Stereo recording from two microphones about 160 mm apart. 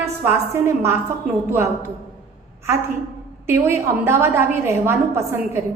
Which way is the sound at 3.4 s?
15° right (ahead or behind).